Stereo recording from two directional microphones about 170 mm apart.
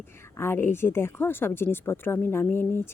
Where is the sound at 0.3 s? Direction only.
15° left (ahead or behind).